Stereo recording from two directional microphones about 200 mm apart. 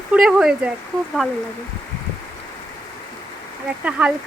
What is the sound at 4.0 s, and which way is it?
Sizzle, 5° right (ahead or behind).